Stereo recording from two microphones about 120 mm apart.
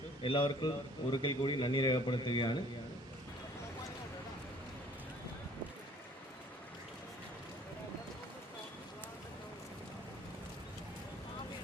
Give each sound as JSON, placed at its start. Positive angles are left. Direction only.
{"t": 0.2, "sound": "a man's voice", "side_deg": 45}